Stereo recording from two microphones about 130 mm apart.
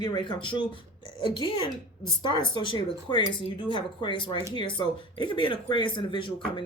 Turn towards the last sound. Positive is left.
turn(degrees=40)  # may be behind; listen again after turning